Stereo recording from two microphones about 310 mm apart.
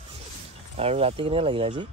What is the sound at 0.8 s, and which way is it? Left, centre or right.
Speech, centre.